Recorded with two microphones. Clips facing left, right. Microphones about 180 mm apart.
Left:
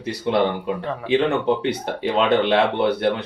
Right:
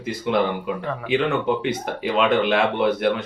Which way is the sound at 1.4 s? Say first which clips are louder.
Left 2 dB; 30° left (ahead or behind).